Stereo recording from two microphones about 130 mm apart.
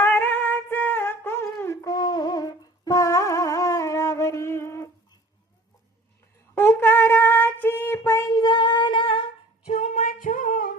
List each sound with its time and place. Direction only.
0.0 s a sound: 15° left (ahead or behind)
6.5 s child singing: 15° left (ahead or behind); by 9.7 s 40° left (ahead or behind)
9.7 s singing: 65° left (ahead or behind); by 10.7 s 90° left